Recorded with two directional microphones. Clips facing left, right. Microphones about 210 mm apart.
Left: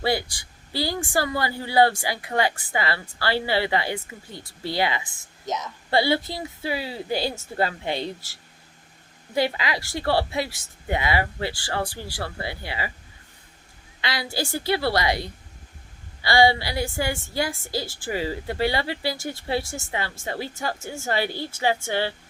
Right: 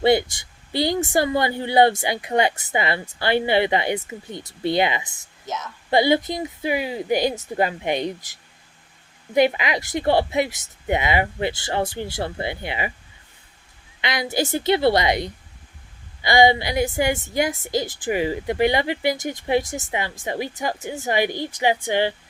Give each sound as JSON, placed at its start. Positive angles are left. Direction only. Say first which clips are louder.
{"t": 0.0, "sound": "speech", "louder": "right 7 dB", "side_deg": -20}
{"t": 5.0, "sound": "speech", "louder": "right 1 dB", "side_deg": -40}
{"t": 5.9, "sound": "a woman's voice", "louder": "right 4 dB", "side_deg": -20}
{"t": 14.0, "sound": "a woman's voice", "louder": "right 5 dB", "side_deg": -20}